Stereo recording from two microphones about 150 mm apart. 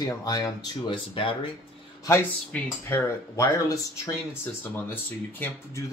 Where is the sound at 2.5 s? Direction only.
20° left (ahead or behind).